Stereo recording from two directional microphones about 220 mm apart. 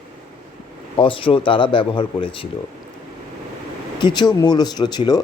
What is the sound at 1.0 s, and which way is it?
Speech, 25° left (ahead or behind).